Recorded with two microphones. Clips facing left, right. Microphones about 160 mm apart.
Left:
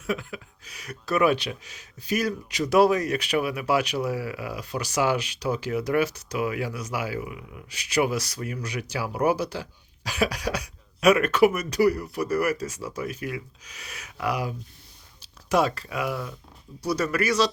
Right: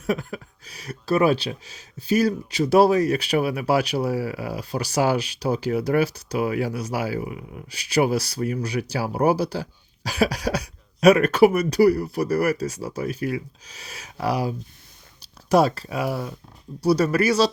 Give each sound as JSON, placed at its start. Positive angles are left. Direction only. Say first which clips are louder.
{"t": 0.0, "sound": "speech", "louder": "right 4 dB", "side_deg": -40}